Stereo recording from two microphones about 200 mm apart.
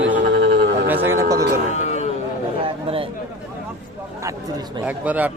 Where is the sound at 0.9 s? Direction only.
10° right (ahead or behind).